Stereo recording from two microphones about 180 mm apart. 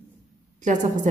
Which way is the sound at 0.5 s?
45° right (ahead or behind).